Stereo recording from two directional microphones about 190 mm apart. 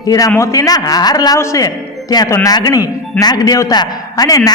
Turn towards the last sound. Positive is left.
turn(degrees=20)  # may be behind; listen again after turning